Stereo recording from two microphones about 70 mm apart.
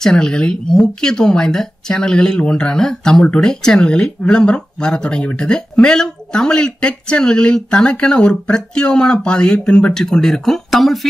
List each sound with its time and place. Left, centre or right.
0.0 s speech: centre